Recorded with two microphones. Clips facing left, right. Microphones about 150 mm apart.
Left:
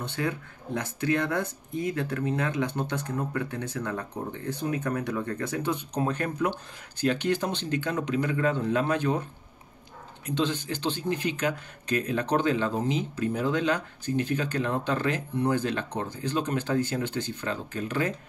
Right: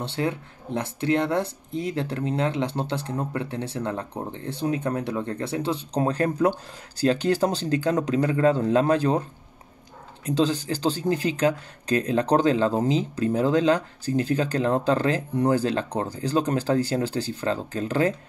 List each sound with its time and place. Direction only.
0.0 s speech: 30° right (ahead or behind)
10.2 s speech: 35° right (ahead or behind)